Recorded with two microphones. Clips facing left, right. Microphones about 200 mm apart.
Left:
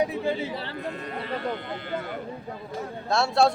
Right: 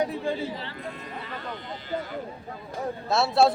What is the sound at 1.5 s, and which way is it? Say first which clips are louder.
Speech: left 4 dB; 60° left (ahead or behind).